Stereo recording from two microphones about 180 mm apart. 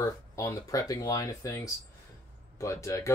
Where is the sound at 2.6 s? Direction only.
15° left (ahead or behind).